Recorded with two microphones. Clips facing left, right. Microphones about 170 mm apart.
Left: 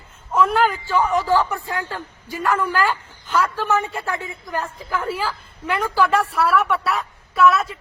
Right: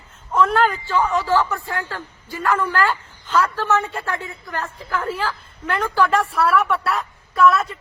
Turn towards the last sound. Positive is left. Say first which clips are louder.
# even
turn(degrees=0)  # may be behind; listen again after turning